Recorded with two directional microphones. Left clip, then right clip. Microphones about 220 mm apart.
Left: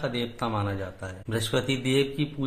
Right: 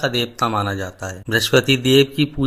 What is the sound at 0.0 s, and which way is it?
Speech, 35° right (ahead or behind).